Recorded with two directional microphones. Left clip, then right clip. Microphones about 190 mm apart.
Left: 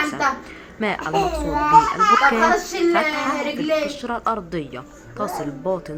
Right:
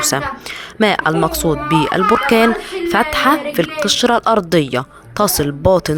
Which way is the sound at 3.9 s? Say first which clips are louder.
Right 11 dB; 55° right (ahead or behind).